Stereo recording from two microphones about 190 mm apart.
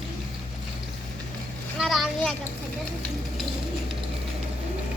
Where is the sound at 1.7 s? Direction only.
Centre (ahead or behind).